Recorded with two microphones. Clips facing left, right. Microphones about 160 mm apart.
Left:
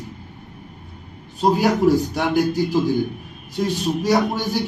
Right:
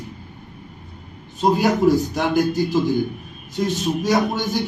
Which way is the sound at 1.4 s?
10° left (ahead or behind).